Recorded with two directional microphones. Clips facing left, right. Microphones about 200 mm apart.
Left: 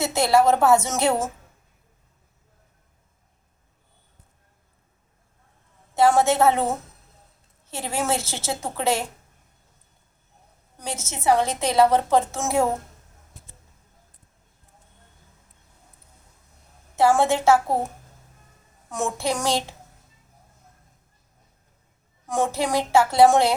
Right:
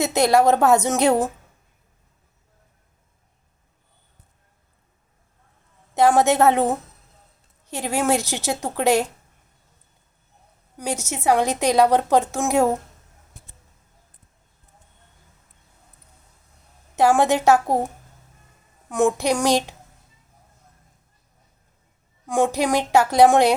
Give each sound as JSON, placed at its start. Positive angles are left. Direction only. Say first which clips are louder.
{"t": 0.0, "sound": "a woman's voice", "louder": "right 2 dB", "side_deg": -15}
{"t": 5.9, "sound": "a woman's voice", "louder": "right 2 dB", "side_deg": -15}
{"t": 7.7, "sound": "a woman's voice", "louder": "right 4 dB", "side_deg": -15}
{"t": 10.8, "sound": "a woman's voice", "louder": "right 6 dB", "side_deg": -15}
{"t": 16.9, "sound": "a woman's voice", "louder": "right 2 dB", "side_deg": -15}
{"t": 19.1, "sound": "a woman's voice", "louder": "right 5 dB", "side_deg": -15}
{"t": 22.3, "sound": "a woman's voice", "louder": "right 4 dB", "side_deg": -15}